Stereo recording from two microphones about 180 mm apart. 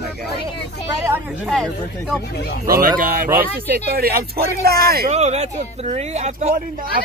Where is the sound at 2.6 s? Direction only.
55° right (ahead or behind).